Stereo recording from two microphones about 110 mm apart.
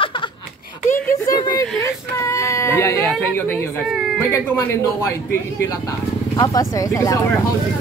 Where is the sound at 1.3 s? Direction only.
35° left (ahead or behind).